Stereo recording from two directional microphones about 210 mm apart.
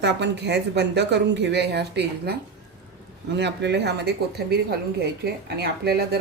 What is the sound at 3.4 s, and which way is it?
Speech, 55° right (ahead or behind).